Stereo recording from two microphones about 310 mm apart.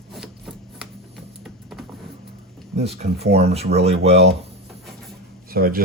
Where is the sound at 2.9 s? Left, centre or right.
Centre.